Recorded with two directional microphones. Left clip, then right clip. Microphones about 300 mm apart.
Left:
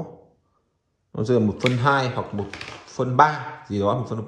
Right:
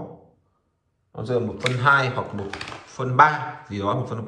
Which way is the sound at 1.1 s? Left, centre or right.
Left.